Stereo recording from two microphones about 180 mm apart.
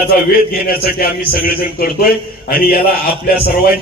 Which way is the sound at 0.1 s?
55° left (ahead or behind).